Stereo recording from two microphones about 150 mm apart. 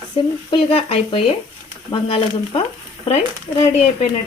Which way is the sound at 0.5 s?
45° left (ahead or behind).